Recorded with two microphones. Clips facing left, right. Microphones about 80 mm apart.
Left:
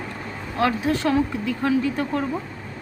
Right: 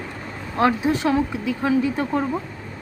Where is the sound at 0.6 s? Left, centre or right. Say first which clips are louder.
Right 2 dB; centre.